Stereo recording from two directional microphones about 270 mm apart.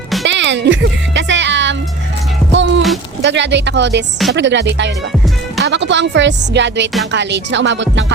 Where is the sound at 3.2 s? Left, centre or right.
Right.